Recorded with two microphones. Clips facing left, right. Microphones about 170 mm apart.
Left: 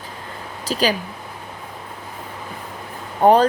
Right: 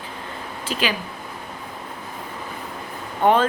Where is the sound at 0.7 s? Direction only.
40° left (ahead or behind).